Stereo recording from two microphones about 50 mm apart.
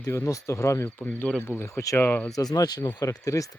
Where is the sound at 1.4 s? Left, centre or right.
Left.